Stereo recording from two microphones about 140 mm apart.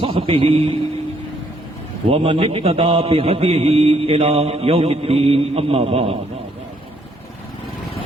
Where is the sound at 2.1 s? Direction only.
40° right (ahead or behind).